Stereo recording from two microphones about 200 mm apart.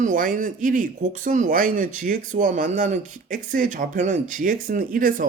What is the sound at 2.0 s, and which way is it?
Speech, 40° right (ahead or behind).